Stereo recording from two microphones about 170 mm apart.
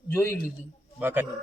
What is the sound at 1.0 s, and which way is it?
Speech, 10° right (ahead or behind).